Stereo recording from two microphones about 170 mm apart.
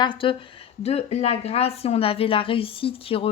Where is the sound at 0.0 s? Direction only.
30° left (ahead or behind).